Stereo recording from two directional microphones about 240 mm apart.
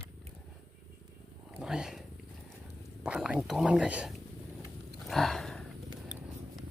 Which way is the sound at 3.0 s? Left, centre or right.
Centre.